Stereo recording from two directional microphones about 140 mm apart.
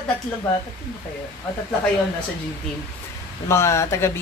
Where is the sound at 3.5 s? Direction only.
20° left (ahead or behind).